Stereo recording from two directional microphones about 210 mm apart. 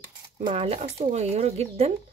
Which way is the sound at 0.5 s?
30° right (ahead or behind).